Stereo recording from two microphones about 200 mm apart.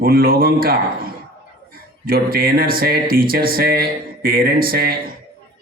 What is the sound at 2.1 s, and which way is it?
Speech, 45° right (ahead or behind).